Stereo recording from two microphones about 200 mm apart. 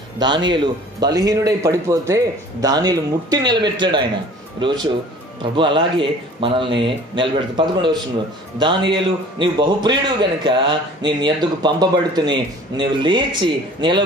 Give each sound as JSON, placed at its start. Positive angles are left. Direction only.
{"t": 0.2, "sound": "a man's voice", "side_deg": -20}